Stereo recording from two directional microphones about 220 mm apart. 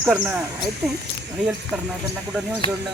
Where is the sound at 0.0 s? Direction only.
5° right (ahead or behind).